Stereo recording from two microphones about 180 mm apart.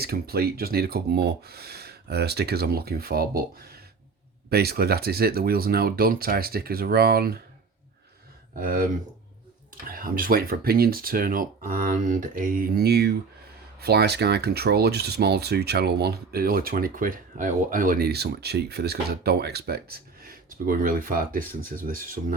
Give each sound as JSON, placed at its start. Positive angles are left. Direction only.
{"t": 0.0, "sound": "speech", "side_deg": -60}
{"t": 8.5, "sound": "speech", "side_deg": -50}